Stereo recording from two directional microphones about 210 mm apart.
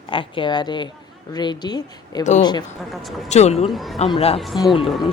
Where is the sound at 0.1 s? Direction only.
25° left (ahead or behind).